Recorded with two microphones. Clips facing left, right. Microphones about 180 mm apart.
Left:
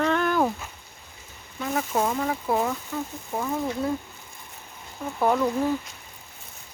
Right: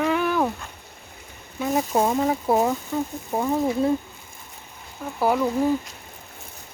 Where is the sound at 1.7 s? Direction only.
25° right (ahead or behind).